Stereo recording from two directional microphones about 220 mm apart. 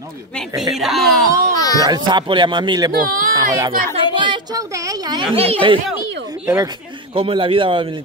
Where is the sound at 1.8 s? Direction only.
20° right (ahead or behind).